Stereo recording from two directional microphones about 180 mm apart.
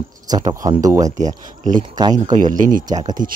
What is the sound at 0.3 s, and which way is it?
Speech, 20° right (ahead or behind).